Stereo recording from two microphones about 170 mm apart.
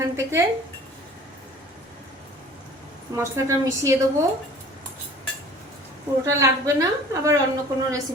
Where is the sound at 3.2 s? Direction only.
20° right (ahead or behind).